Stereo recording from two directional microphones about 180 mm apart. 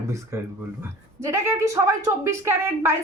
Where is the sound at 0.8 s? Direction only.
15° right (ahead or behind).